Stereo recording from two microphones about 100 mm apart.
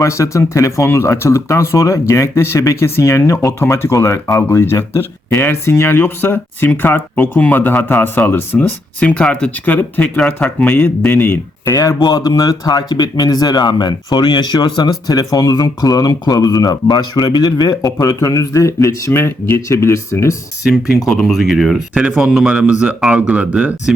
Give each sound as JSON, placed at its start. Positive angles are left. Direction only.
{"t": 0.0, "sound": "speech", "side_deg": 30}
{"t": 11.7, "sound": "speech", "side_deg": 35}
{"t": 21.1, "sound": "speech", "side_deg": 0}